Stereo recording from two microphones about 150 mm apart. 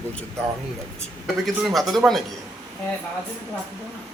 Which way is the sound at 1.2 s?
Centre (ahead or behind).